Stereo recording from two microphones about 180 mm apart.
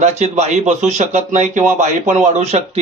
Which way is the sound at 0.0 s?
40° right (ahead or behind).